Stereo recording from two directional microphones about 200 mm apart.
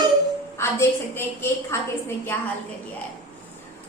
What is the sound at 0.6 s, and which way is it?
A woman's voice, 10° left (ahead or behind).